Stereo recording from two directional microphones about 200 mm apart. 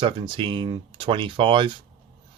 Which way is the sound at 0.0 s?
25° right (ahead or behind).